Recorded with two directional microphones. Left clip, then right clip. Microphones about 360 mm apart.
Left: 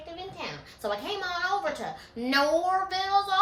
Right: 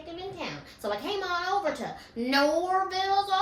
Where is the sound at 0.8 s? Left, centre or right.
Centre.